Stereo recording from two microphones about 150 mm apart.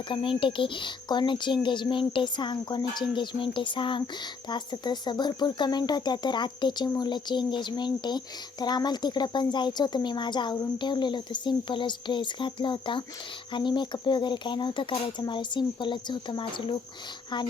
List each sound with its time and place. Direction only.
0.1 s a child's voice: 35° left (ahead or behind)